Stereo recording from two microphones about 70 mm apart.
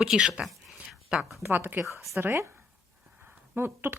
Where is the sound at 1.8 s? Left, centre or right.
Centre.